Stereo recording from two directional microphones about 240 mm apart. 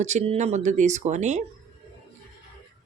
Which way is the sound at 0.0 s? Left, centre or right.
Right.